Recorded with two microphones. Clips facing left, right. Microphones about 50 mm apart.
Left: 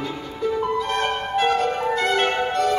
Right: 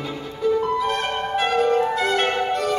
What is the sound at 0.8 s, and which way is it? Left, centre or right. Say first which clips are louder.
Music: even; centre.